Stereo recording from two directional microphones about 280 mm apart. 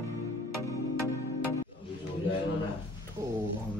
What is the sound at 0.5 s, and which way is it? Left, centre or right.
Music, left.